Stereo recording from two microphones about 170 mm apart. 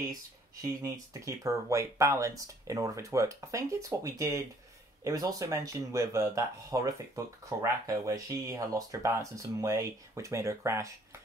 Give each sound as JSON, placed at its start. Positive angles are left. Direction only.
{"t": 0.6, "sound": "speech", "side_deg": -20}